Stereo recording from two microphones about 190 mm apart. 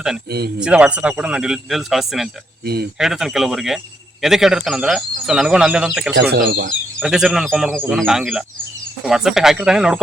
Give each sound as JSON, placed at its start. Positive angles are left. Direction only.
{"t": 0.3, "sound": "speech", "side_deg": -60}
{"t": 0.6, "sound": "speech", "side_deg": -5}
{"t": 2.6, "sound": "speech", "side_deg": -55}
{"t": 3.0, "sound": "speech", "side_deg": 0}
{"t": 6.3, "sound": "speech", "side_deg": -55}
{"t": 7.0, "sound": "speech", "side_deg": -5}